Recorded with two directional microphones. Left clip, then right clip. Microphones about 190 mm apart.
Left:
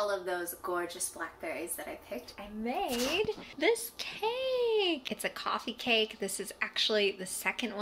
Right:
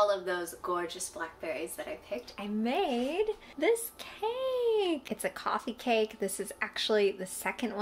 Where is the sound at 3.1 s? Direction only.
5° right (ahead or behind).